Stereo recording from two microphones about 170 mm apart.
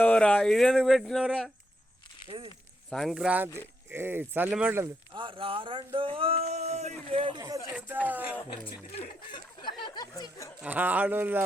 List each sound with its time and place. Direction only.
0.0 s speech: 5° left (ahead or behind)
2.2 s speech: 30° right (ahead or behind)
2.9 s speech: centre (ahead or behind)
5.1 s speech: 30° right (ahead or behind)
7.8 s speech: 10° right (ahead or behind)
9.0 s speech: 30° left (ahead or behind)
10.6 s speech: 10° right (ahead or behind)